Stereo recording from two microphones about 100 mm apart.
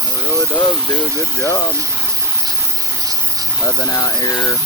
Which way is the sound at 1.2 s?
30° left (ahead or behind).